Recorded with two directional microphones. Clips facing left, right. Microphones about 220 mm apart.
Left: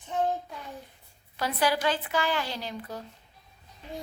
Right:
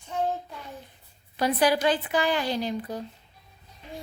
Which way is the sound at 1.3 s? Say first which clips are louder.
Right 4 dB; 15° right (ahead or behind).